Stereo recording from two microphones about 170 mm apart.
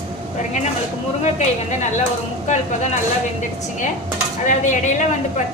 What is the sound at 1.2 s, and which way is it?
Speech, 45° left (ahead or behind).